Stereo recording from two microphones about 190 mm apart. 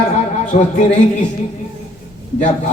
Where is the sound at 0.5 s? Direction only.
35° left (ahead or behind).